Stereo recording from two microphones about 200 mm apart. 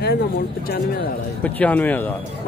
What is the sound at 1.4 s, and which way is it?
Speech, 10° left (ahead or behind).